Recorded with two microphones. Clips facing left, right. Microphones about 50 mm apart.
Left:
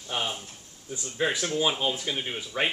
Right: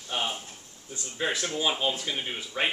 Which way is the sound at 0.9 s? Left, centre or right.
Centre.